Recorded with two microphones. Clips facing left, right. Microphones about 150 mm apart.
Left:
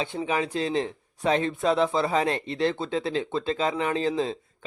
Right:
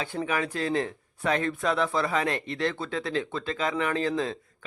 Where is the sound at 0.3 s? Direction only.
25° left (ahead or behind).